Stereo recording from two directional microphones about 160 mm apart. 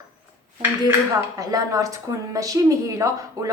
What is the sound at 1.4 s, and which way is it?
Speech, 20° right (ahead or behind).